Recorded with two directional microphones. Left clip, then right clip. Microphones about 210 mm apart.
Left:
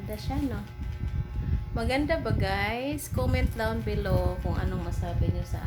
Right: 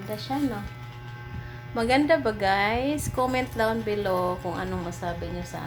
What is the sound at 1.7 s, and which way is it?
A woman's voice, 5° right (ahead or behind).